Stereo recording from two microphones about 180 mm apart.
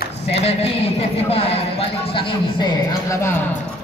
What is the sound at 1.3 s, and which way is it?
Speech, 35° left (ahead or behind).